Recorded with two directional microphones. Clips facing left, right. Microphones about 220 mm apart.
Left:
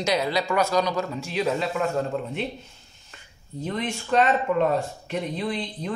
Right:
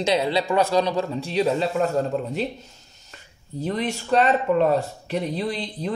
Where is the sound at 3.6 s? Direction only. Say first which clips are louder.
Right 3 dB; 35° right (ahead or behind).